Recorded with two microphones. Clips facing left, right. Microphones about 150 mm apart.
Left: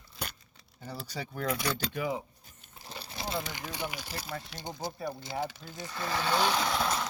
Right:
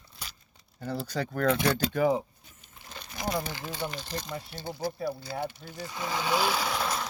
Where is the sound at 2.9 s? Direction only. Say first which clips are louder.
Right 4 dB; 30° left (ahead or behind).